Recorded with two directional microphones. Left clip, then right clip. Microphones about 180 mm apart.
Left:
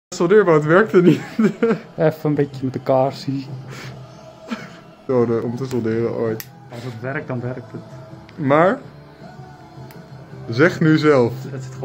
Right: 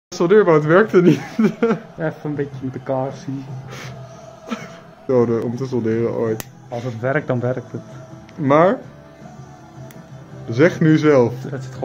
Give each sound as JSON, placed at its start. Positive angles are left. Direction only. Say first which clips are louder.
{"t": 0.1, "sound": "speech", "louder": "right 1 dB", "side_deg": 0}
{"t": 2.0, "sound": "speech", "louder": "left 6 dB", "side_deg": 65}
{"t": 4.5, "sound": "speech", "louder": "right 1 dB", "side_deg": -5}
{"t": 7.0, "sound": "a man's voice", "louder": "right 6 dB", "side_deg": -55}
{"t": 8.4, "sound": "speech", "louder": "right 1 dB", "side_deg": 0}
{"t": 10.5, "sound": "speech", "louder": "right 1 dB", "side_deg": 0}